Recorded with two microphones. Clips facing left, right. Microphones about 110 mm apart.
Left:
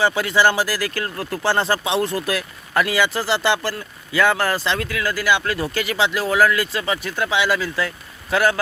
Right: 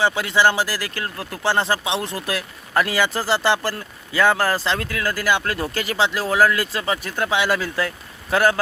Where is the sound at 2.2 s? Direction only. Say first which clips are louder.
Left 2 dB; 30° right (ahead or behind).